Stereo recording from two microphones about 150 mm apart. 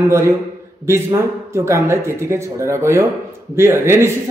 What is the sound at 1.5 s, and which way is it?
A man's voice, 20° right (ahead or behind).